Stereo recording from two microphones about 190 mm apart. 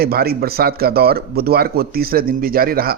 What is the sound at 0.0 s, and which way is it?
A man's voice, 55° right (ahead or behind).